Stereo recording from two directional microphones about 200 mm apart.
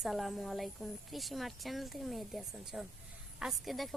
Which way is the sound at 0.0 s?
Centre (ahead or behind).